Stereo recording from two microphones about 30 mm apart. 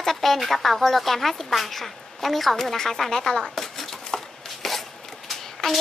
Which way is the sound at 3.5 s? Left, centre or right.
Centre.